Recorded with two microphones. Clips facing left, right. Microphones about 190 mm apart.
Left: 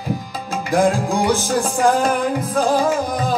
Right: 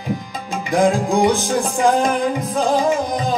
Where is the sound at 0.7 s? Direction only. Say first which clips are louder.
Right 1 dB; 15° right (ahead or behind).